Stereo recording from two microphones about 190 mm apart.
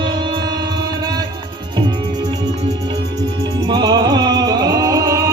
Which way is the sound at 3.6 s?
20° right (ahead or behind).